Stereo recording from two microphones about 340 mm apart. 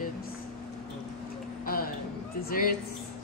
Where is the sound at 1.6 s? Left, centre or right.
Left.